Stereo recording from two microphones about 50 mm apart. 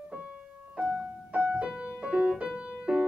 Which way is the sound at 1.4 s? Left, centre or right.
Right.